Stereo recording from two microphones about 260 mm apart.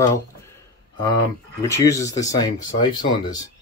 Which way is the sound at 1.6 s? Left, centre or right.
Centre.